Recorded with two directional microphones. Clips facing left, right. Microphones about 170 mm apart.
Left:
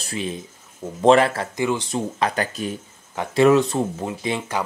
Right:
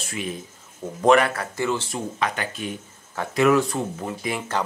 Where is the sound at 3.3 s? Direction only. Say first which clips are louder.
Left 3 dB; 25° left (ahead or behind).